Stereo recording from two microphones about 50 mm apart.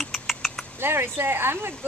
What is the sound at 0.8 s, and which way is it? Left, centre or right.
Speech, right.